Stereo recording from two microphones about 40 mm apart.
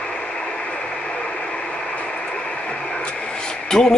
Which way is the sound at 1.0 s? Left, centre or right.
Left.